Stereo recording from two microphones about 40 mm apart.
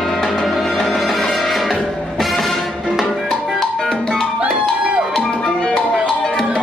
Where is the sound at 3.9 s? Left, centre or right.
Centre.